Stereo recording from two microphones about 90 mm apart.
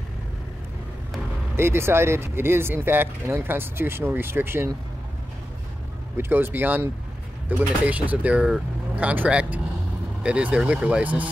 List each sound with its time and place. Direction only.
1.6 s speech: 25° right (ahead or behind)
6.1 s speech: 25° right (ahead or behind)